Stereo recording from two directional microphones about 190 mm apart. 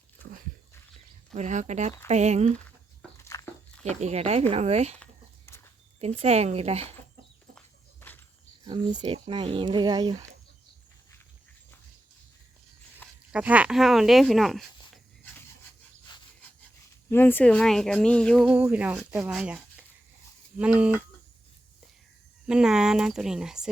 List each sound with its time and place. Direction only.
1.3 s speech: 40° right (ahead or behind)
3.2 s a sound: 15° left (ahead or behind)
3.8 s speech: 35° right (ahead or behind)
6.0 s speech: 35° right (ahead or behind)
8.6 s speech: 25° right (ahead or behind)
13.3 s speech: 5° right (ahead or behind)
17.1 s speech: 10° left (ahead or behind); by 19.5 s 5° right (ahead or behind)
20.6 s speech: 5° right (ahead or behind)
22.4 s speech: 5° right (ahead or behind)